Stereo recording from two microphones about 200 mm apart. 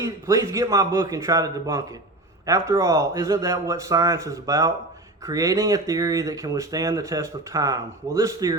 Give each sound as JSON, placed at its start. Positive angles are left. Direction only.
{"t": 0.0, "sound": "speech", "side_deg": -15}